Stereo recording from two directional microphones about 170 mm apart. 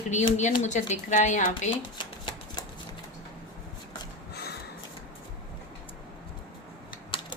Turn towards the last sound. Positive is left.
turn(degrees=30)  # may be behind; listen again after turning